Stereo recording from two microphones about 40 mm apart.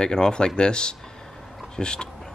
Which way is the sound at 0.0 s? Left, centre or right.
Left.